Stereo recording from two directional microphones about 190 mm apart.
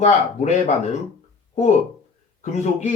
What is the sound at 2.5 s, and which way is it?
Speech, 40° left (ahead or behind).